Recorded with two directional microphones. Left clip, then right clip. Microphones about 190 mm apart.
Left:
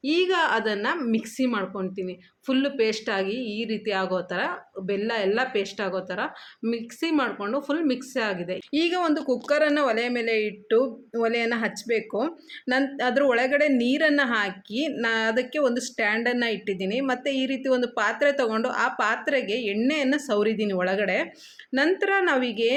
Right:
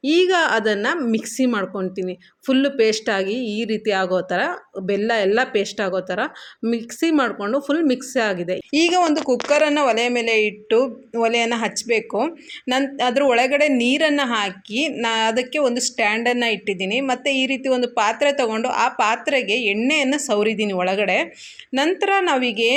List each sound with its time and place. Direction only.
0.0 s speech: 35° right (ahead or behind)
8.7 s a woman's voice: 15° right (ahead or behind)